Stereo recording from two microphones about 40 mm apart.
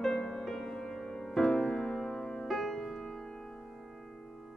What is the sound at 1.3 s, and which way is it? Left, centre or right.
Music, centre.